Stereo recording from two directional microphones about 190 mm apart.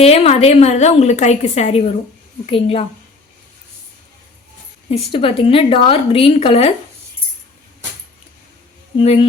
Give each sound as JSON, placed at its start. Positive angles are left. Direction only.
{"t": 0.0, "sound": "a woman's voice", "side_deg": 35}
{"t": 4.9, "sound": "a woman's voice", "side_deg": 30}
{"t": 9.0, "sound": "a woman's voice", "side_deg": 30}